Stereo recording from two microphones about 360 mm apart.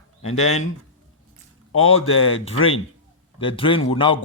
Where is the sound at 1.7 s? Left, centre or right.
Left.